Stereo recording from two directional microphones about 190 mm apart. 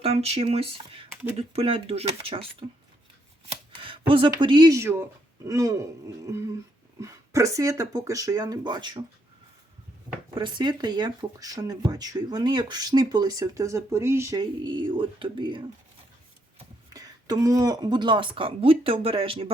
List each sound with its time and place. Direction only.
0.0 s speech: 30° right (ahead or behind)
10.3 s speech: 25° right (ahead or behind)
16.9 s speech: 20° right (ahead or behind)